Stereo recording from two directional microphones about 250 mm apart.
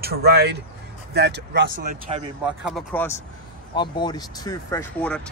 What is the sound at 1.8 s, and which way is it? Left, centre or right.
Speech, right.